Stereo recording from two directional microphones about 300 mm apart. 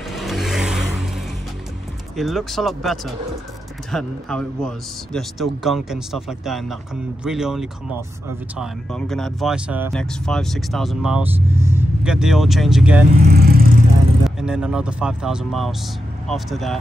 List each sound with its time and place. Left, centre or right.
0.1 s vehicle: centre
2.1 s speech: centre
13.2 s vehicle: right
14.2 s speech: centre